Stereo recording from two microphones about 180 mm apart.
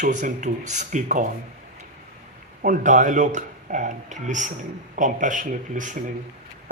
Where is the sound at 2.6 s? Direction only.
45° right (ahead or behind).